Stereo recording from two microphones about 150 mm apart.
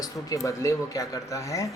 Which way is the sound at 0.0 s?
25° left (ahead or behind).